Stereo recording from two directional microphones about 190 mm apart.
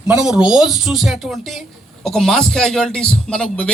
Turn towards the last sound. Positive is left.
turn(degrees=5)  # may be behind; listen again after turning